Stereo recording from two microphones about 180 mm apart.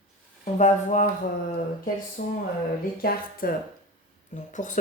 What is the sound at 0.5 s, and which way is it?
Speech, 45° left (ahead or behind).